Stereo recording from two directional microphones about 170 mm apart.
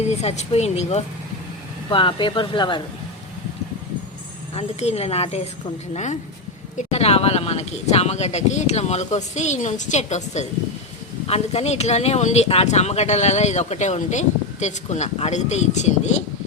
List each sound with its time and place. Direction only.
0.1 s speech: 40° left (ahead or behind)
4.5 s speech: 40° left (ahead or behind)